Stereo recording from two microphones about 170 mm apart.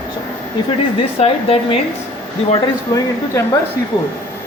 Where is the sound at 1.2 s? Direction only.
35° left (ahead or behind).